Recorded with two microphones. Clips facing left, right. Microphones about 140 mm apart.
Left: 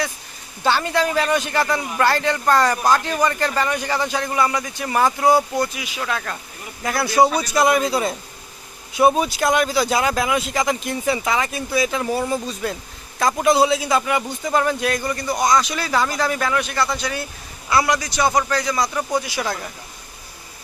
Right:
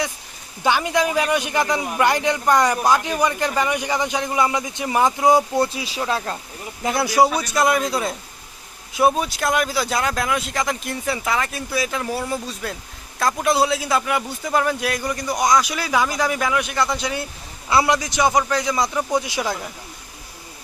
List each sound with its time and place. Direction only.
0.6 s a man's voice: 10° right (ahead or behind); by 6.4 s 30° right (ahead or behind)
6.8 s a man's voice: 15° right (ahead or behind)
7.2 s a man's voice: centre (ahead or behind); by 19.5 s 20° right (ahead or behind)
19.5 s a man's voice: 10° right (ahead or behind)